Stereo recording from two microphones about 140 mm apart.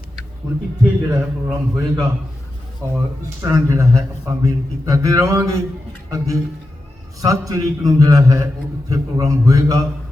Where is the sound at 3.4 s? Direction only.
20° right (ahead or behind).